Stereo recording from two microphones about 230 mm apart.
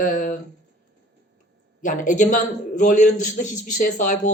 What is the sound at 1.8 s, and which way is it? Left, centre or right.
A man's voice, left.